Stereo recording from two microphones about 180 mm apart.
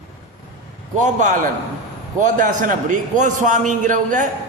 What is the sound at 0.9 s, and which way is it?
A man's voice, 45° right (ahead or behind).